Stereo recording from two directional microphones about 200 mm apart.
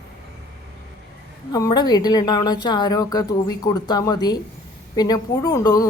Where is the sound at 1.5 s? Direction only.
20° left (ahead or behind).